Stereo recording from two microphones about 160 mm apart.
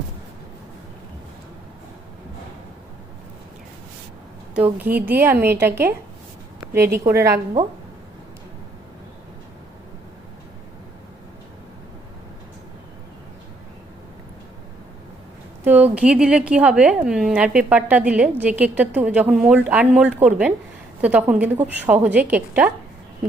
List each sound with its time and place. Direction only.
4.5 s a woman's voice: 10° right (ahead or behind)
15.6 s a woman's voice: 10° right (ahead or behind)